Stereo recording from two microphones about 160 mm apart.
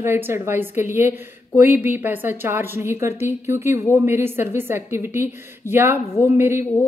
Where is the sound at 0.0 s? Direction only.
15° right (ahead or behind).